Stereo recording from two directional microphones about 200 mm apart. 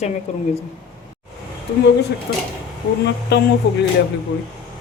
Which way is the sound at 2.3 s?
55° left (ahead or behind).